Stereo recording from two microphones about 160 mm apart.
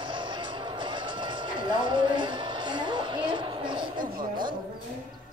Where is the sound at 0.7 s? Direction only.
30° right (ahead or behind).